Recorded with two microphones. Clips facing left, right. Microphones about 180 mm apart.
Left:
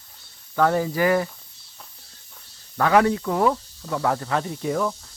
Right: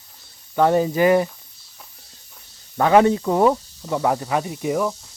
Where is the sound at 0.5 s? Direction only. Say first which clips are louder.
Right 3 dB; 20° right (ahead or behind).